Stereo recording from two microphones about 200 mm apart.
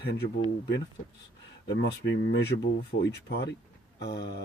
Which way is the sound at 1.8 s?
65° left (ahead or behind).